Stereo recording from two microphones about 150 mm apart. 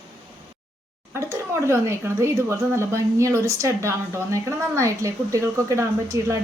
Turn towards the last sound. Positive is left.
turn(degrees=-20)  # may be behind; listen again after turning